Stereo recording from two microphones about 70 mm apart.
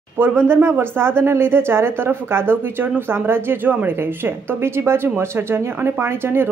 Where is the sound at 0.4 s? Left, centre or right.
Right.